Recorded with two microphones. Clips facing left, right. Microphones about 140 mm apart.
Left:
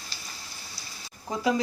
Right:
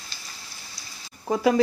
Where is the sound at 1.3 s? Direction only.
65° right (ahead or behind).